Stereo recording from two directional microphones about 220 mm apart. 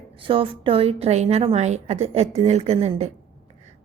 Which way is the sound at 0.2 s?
25° right (ahead or behind).